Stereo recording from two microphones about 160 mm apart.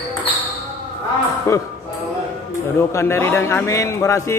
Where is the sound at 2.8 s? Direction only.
15° left (ahead or behind).